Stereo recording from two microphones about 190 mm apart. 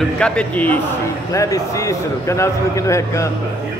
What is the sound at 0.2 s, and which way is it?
A man's voice, 5° left (ahead or behind).